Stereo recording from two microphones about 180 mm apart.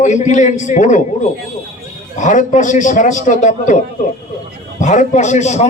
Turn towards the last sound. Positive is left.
turn(degrees=40)  # may be behind; listen again after turning